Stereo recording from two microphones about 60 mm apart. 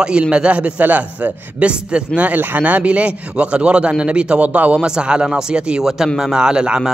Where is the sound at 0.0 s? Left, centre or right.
Centre.